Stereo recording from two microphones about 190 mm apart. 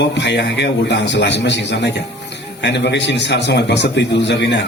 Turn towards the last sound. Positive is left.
turn(degrees=65)  # may be behind; listen again after turning